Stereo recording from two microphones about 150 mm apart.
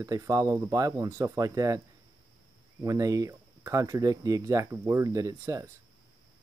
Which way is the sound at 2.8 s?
20° right (ahead or behind).